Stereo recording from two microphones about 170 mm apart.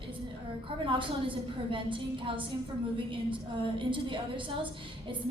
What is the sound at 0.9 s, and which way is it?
A woman's voice, 30° right (ahead or behind).